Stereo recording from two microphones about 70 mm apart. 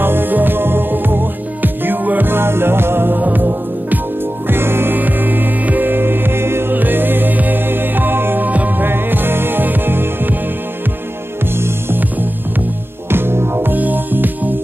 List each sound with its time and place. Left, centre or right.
0.0 s music: right
11.5 s music: right